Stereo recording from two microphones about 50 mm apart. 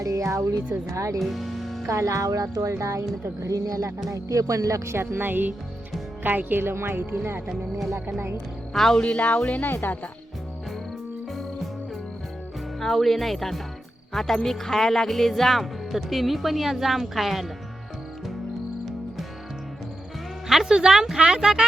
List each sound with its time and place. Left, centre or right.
0.0 s speech: right
1.2 s music: centre
1.9 s a woman's voice: right
7.4 s speech: centre
9.0 s speech: left
9.6 s speech: left
11.3 s music: centre
12.8 s speech: centre
20.5 s speech: centre